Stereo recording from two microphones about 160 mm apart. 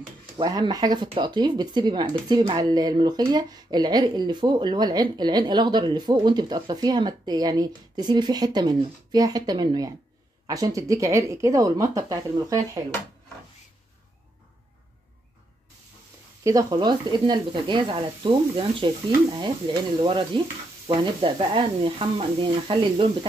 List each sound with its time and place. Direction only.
0.4 s speech: 25° right (ahead or behind)
16.4 s speech: 25° right (ahead or behind)